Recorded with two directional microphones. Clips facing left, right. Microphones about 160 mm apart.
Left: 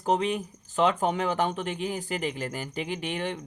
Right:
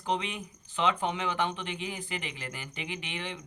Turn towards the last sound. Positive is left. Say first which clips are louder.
# left 7 dB
turn(degrees=45)  # may be behind; listen again after turning